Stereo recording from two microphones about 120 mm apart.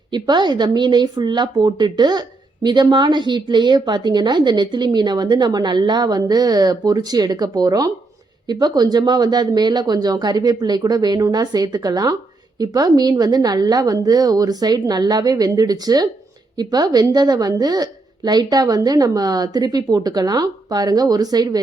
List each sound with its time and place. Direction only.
0.1 s a woman's voice: 40° right (ahead or behind)